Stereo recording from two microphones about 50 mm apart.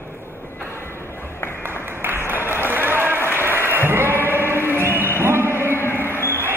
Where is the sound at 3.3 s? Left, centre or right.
Right.